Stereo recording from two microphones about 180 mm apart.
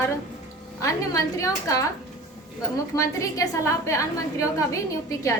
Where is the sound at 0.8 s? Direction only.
15° left (ahead or behind).